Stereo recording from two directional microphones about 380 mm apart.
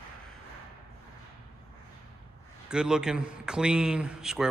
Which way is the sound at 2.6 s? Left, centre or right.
Centre.